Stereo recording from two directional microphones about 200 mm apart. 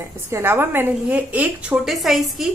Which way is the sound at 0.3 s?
10° right (ahead or behind).